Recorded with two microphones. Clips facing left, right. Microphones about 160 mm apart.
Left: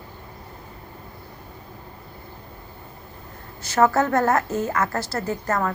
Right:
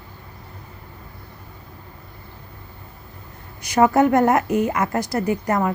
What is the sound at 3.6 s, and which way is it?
A woman's voice, 15° right (ahead or behind).